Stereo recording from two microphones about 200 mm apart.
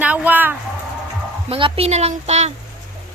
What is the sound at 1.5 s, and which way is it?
A woman's voice, 25° right (ahead or behind).